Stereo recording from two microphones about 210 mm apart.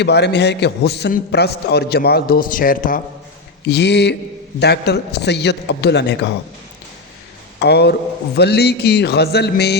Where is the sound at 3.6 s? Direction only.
55° left (ahead or behind).